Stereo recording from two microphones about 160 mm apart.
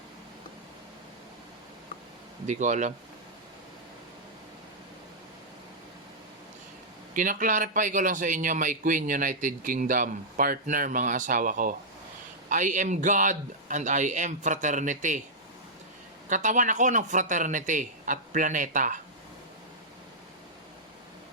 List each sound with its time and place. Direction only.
2.5 s a man's voice: 50° right (ahead or behind)
7.1 s a man's voice: 55° right (ahead or behind)
16.3 s a man's voice: 50° right (ahead or behind)